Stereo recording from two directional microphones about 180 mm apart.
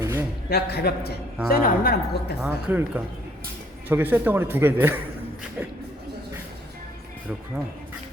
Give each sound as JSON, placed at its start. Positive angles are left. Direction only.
{"t": 0.0, "sound": "a sound", "side_deg": -15}
{"t": 0.5, "sound": "a woman's voice", "side_deg": 60}
{"t": 2.4, "sound": "a man's voice", "side_deg": -10}